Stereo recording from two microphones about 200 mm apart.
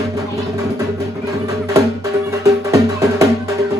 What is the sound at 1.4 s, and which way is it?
Music, 15° right (ahead or behind).